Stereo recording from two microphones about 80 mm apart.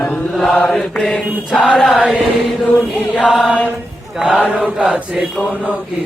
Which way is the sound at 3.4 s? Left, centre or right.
Centre.